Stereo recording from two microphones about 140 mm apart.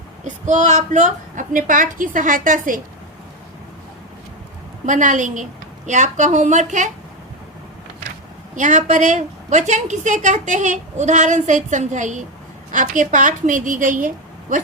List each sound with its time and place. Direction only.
0.4 s a woman's voice: 60° right (ahead or behind)
4.9 s a woman's voice: 65° right (ahead or behind)
8.5 s a woman's voice: 65° right (ahead or behind)